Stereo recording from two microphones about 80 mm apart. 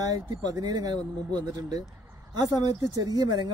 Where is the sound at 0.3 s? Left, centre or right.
Right.